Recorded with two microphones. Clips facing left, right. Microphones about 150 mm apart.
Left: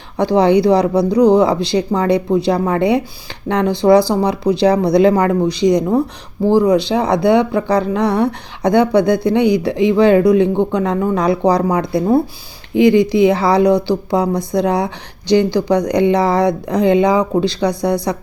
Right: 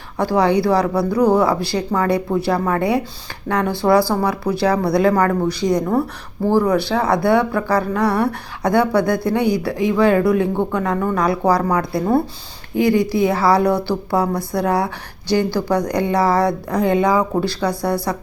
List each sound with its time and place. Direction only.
0.2 s speech: 20° left (ahead or behind)